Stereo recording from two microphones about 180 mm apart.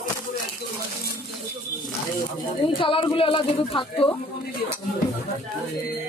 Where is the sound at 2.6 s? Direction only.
30° left (ahead or behind).